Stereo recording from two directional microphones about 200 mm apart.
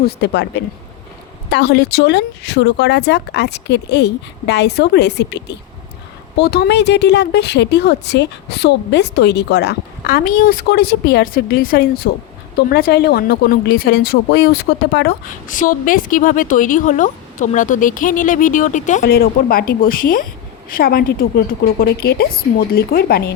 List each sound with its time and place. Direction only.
0.0 s speech: 60° left (ahead or behind)